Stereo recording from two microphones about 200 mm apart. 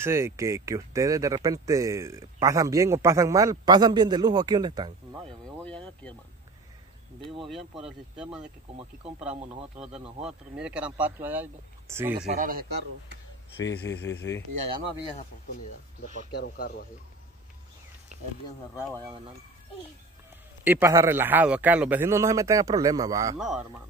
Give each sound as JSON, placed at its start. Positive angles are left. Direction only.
{"t": 0.0, "sound": "speech", "side_deg": -15}
{"t": 5.6, "sound": "a sound", "side_deg": 5}
{"t": 7.2, "sound": "speech", "side_deg": 0}
{"t": 10.2, "sound": "speech", "side_deg": -5}
{"t": 12.3, "sound": "speech", "side_deg": -45}
{"t": 13.6, "sound": "speech", "side_deg": 60}
{"t": 16.3, "sound": "speech", "side_deg": 50}
{"t": 18.9, "sound": "speech", "side_deg": -25}
{"t": 20.6, "sound": "speech", "side_deg": -10}
{"t": 23.3, "sound": "speech", "side_deg": -5}